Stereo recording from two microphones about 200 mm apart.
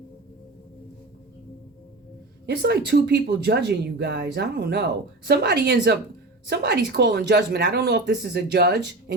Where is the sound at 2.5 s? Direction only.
55° right (ahead or behind).